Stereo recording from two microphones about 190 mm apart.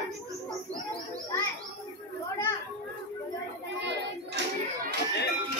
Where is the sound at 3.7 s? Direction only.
70° right (ahead or behind).